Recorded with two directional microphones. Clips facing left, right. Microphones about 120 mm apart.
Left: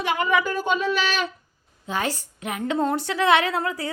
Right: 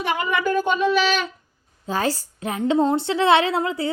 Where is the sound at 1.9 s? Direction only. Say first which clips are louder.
Right 3 dB; 35° right (ahead or behind).